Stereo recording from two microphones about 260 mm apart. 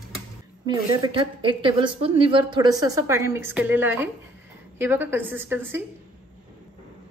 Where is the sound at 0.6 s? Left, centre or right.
Centre.